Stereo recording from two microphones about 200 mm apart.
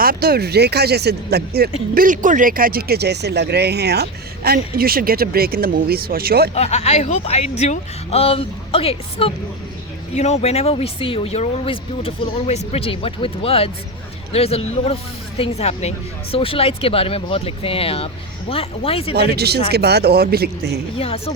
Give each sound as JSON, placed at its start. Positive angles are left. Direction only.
{"t": 0.0, "sound": "speech", "side_deg": -50}
{"t": 2.0, "sound": "speech", "side_deg": -40}
{"t": 6.5, "sound": "speech", "side_deg": 35}
{"t": 19.1, "sound": "speech", "side_deg": -55}
{"t": 20.9, "sound": "speech", "side_deg": 30}